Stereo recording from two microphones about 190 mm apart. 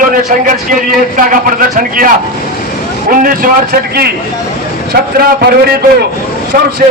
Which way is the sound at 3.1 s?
45° right (ahead or behind).